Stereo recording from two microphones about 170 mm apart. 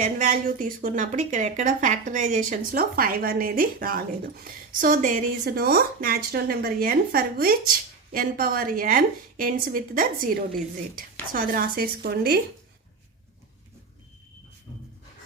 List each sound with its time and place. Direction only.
0.0 s a woman's voice: 50° right (ahead or behind); by 12.4 s 70° right (ahead or behind)